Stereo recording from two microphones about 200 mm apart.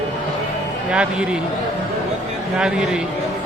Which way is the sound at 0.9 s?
5° right (ahead or behind).